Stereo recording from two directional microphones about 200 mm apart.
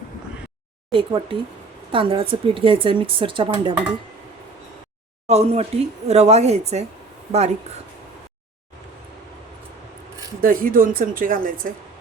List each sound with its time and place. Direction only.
0.9 s speech: 25° right (ahead or behind)
5.3 s speech: 30° right (ahead or behind)
10.4 s speech: 45° right (ahead or behind)